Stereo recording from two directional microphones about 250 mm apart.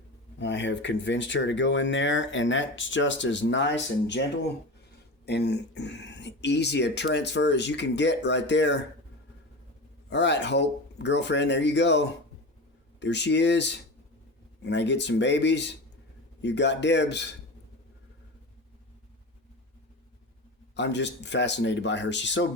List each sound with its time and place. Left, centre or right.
0.3 s speech: left
10.1 s speech: left
20.7 s speech: left